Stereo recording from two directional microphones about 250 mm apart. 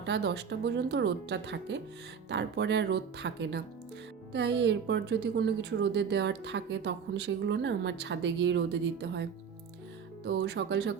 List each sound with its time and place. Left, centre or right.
0.0 s a woman's voice: right
10.2 s a woman's voice: right